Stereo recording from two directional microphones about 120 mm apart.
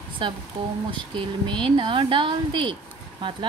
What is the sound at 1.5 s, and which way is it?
Speech, 45° right (ahead or behind).